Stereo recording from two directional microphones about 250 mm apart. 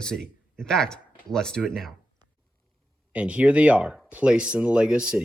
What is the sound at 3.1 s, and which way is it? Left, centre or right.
Speech, centre.